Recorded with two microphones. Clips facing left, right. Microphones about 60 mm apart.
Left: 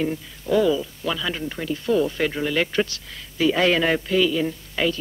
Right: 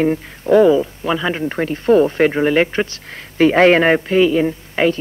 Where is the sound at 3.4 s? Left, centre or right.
Right.